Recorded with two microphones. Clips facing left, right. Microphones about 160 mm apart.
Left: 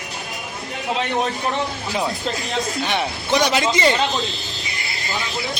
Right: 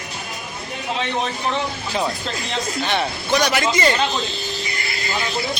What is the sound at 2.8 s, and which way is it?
Speech, 10° left (ahead or behind).